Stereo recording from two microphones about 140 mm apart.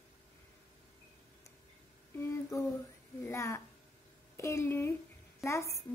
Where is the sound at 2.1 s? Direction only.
20° left (ahead or behind).